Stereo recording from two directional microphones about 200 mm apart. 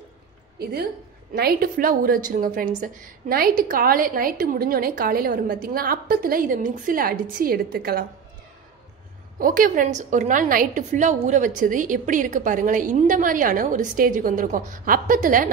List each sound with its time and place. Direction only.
0.6 s a woman's voice: 50° right (ahead or behind)
9.4 s a woman's voice: 40° right (ahead or behind)